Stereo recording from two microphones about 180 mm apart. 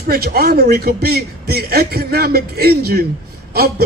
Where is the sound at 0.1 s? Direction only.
60° right (ahead or behind).